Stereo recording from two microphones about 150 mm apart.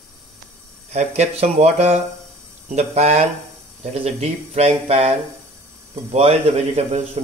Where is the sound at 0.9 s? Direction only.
45° right (ahead or behind).